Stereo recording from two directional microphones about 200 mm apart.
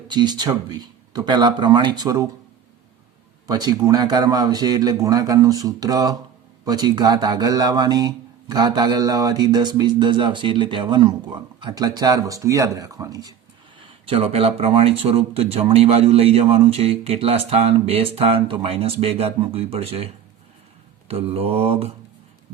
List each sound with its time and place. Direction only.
0.1 s a man's voice: 20° right (ahead or behind)
3.4 s a man's voice: 20° right (ahead or behind)
21.1 s a man's voice: 30° right (ahead or behind)